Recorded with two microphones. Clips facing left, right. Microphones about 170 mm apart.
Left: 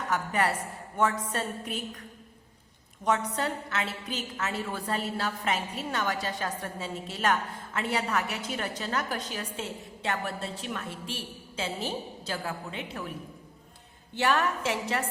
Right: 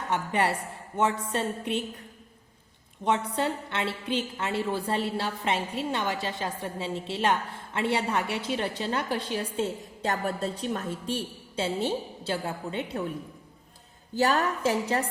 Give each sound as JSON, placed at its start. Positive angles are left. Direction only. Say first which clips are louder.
{"t": 0.1, "sound": "a woman's voice", "louder": "right 2 dB", "side_deg": -25}
{"t": 3.0, "sound": "a woman's voice", "louder": "right 2 dB", "side_deg": -25}
{"t": 14.2, "sound": "a woman's voice", "louder": "right 2 dB", "side_deg": -35}